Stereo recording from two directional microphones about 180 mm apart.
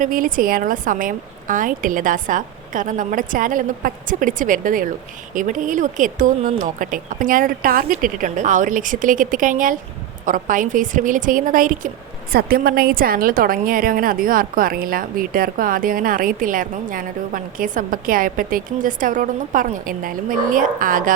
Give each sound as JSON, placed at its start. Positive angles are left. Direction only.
{"t": 0.0, "sound": "a woman's voice", "side_deg": -50}